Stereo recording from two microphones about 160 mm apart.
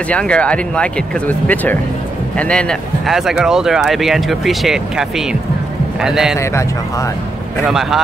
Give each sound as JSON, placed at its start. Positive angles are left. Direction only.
{"t": 0.1, "sound": "speech", "side_deg": 5}
{"t": 6.4, "sound": "speech", "side_deg": 15}
{"t": 7.6, "sound": "speech", "side_deg": 0}